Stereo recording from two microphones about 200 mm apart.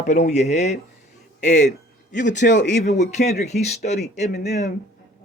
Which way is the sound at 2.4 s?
60° left (ahead or behind).